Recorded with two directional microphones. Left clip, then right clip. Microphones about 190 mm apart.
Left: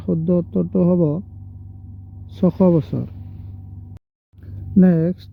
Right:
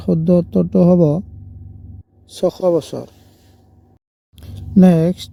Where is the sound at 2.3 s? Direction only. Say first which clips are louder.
Right 2 dB; 40° right (ahead or behind).